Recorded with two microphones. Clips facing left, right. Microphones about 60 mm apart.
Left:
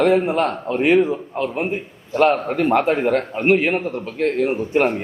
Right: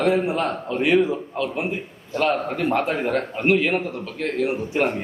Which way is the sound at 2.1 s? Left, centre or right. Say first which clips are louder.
Left 5 dB; left.